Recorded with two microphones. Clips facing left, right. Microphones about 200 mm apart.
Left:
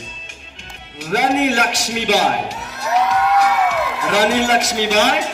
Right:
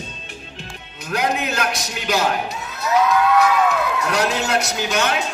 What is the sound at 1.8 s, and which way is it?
Speech, 70° left (ahead or behind).